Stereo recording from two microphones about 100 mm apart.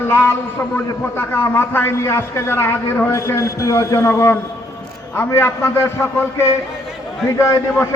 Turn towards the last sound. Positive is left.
turn(degrees=30)  # may be behind; listen again after turning